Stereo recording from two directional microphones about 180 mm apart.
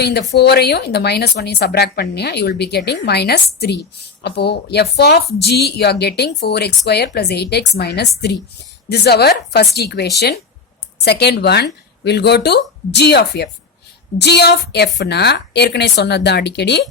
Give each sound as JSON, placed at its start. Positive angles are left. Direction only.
{"t": 0.0, "sound": "a woman's voice", "side_deg": 65}